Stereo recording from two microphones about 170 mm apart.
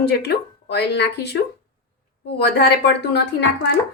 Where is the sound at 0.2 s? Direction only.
75° left (ahead or behind).